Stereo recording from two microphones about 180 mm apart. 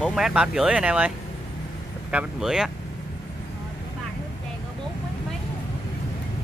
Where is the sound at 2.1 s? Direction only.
5° right (ahead or behind).